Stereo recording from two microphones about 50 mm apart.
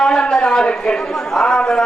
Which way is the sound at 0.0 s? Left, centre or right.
Centre.